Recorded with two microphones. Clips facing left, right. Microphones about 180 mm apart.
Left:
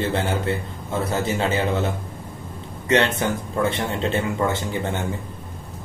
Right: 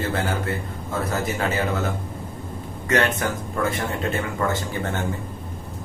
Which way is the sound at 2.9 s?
25° left (ahead or behind).